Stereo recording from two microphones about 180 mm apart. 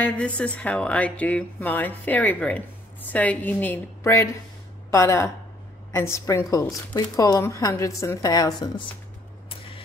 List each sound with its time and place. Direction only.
0.0 s a woman's voice: 5° left (ahead or behind); by 8.8 s 20° left (ahead or behind)